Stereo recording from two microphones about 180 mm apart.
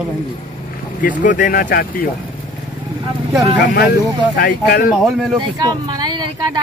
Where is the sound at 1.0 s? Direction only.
50° left (ahead or behind).